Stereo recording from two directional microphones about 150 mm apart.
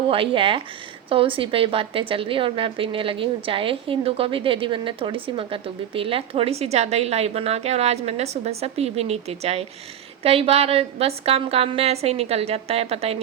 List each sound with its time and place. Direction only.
0.1 s a woman's voice: 35° right (ahead or behind)